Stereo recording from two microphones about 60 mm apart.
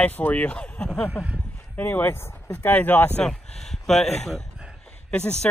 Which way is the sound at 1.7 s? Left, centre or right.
Left.